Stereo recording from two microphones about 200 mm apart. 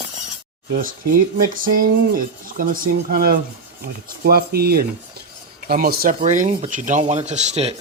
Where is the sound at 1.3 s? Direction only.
45° right (ahead or behind).